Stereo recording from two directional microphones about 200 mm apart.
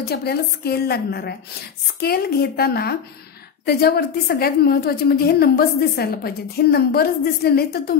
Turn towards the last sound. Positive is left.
turn(degrees=50)  # may be behind; listen again after turning